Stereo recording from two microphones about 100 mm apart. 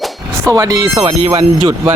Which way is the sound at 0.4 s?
35° right (ahead or behind).